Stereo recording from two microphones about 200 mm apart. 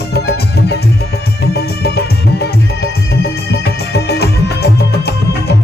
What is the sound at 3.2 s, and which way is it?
Music, 55° left (ahead or behind).